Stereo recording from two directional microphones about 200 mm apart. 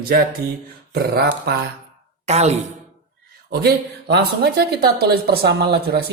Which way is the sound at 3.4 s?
55° right (ahead or behind).